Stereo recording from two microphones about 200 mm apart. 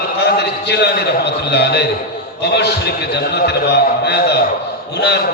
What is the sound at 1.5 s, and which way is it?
A man's voice, 55° left (ahead or behind).